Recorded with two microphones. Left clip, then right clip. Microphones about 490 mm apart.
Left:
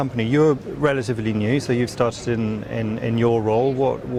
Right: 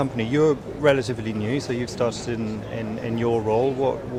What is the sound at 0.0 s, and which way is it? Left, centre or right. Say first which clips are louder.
Speech: left 2 dB; left.